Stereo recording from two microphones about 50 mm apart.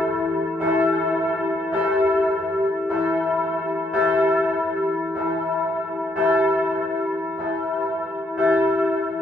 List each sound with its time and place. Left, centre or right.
0.7 s church bell: right
3.9 s church bell: right
8.4 s church bell: right